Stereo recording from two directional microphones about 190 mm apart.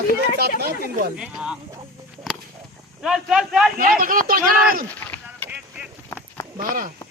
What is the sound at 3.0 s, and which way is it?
Speech, centre (ahead or behind).